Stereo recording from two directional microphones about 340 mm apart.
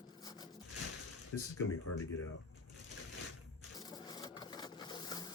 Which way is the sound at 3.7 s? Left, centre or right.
Centre.